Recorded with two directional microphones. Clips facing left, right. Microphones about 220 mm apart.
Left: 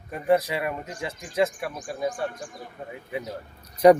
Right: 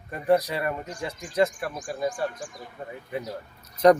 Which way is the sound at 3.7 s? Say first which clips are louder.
Left 2 dB; 10° left (ahead or behind).